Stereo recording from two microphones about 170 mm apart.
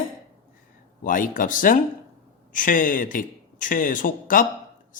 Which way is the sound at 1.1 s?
55° left (ahead or behind).